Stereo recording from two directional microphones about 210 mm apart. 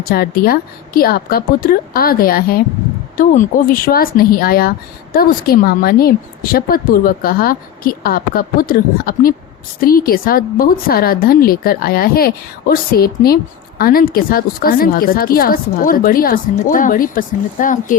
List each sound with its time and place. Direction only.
0.0 s a woman's voice: 45° left (ahead or behind)